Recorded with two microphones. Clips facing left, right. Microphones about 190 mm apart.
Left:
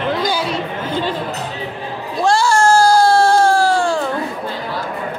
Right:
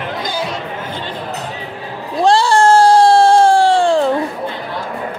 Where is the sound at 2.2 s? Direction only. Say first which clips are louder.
Right 3 dB; 30° right (ahead or behind).